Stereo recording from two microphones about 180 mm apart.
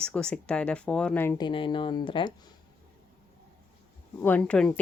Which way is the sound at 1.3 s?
25° left (ahead or behind).